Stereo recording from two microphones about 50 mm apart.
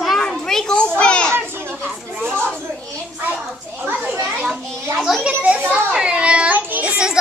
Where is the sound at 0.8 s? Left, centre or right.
Left.